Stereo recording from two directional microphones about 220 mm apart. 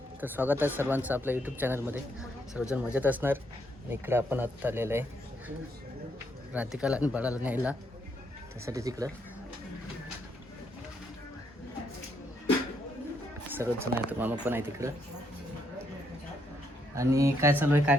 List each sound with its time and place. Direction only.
0.2 s speech: 10° right (ahead or behind)
6.5 s speech: 5° right (ahead or behind)
13.6 s speech: 10° right (ahead or behind)
16.9 s speech: 15° right (ahead or behind)